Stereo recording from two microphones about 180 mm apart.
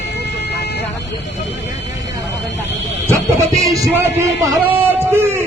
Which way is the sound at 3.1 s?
15° right (ahead or behind).